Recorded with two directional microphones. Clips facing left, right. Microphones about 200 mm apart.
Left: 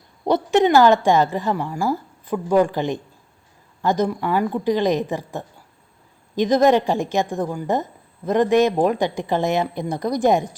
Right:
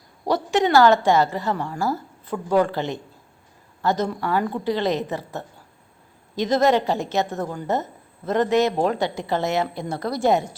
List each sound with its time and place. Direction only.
0.3 s a woman's voice: 20° left (ahead or behind)